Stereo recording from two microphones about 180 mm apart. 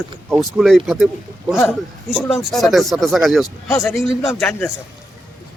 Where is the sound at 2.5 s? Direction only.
Centre (ahead or behind).